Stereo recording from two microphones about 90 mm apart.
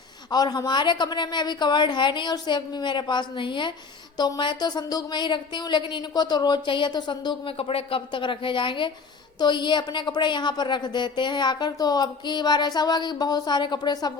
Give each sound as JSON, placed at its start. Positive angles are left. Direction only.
{"t": 0.3, "sound": "a woman's voice", "side_deg": 45}
{"t": 7.4, "sound": "a woman's voice", "side_deg": 90}